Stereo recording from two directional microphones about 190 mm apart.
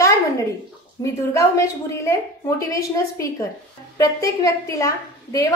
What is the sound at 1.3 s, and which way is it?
A woman's voice, 15° left (ahead or behind).